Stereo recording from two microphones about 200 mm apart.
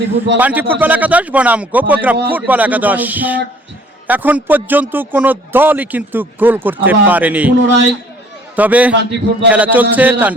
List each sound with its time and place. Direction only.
0.0 s a man's voice: 60° right (ahead or behind)
0.3 s a man's voice: 10° right (ahead or behind)
8.5 s a man's voice: 5° right (ahead or behind)
8.9 s a man's voice: 60° right (ahead or behind)
9.5 s a man's voice: 5° right (ahead or behind)